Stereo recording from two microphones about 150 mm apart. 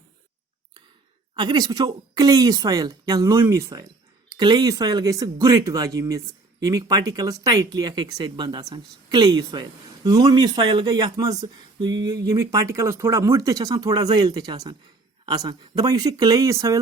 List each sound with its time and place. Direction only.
1.4 s speech: 30° right (ahead or behind)